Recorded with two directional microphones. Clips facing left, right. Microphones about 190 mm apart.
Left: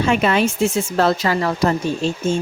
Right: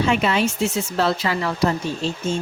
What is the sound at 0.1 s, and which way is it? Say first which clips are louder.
A woman's voice: left 3 dB; 50° left (ahead or behind).